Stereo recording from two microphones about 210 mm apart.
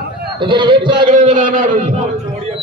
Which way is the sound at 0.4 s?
20° right (ahead or behind).